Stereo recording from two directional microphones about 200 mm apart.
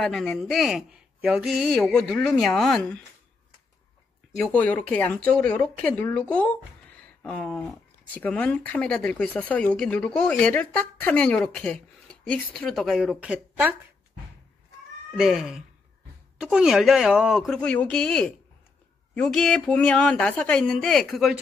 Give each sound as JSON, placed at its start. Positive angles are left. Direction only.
{"t": 0.0, "sound": "speech", "side_deg": 0}
{"t": 4.4, "sound": "speech", "side_deg": 5}
{"t": 15.1, "sound": "speech", "side_deg": 0}